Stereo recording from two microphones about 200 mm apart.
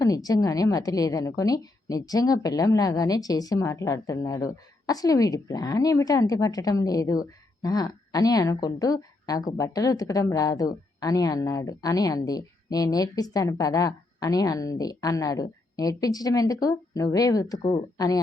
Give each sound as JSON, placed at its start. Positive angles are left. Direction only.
{"t": 0.0, "sound": "a woman's voice", "side_deg": 20}